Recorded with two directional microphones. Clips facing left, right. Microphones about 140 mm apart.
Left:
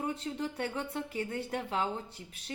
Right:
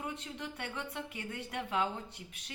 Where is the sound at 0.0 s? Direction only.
35° left (ahead or behind).